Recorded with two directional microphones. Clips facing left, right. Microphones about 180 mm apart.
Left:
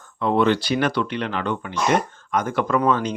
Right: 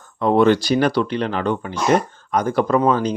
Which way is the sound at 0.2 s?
45° right (ahead or behind).